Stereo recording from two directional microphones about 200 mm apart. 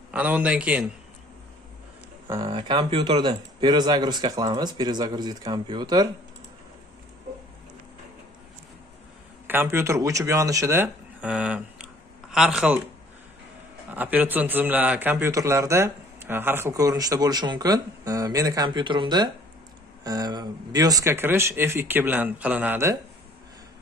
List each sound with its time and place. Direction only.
0.1 s a man's voice: 5° right (ahead or behind)
2.3 s speech: 25° right (ahead or behind)
9.5 s speech: 10° right (ahead or behind)
13.9 s a man's voice: 10° right (ahead or behind)